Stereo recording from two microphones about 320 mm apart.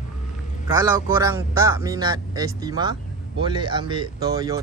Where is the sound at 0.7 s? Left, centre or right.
Centre.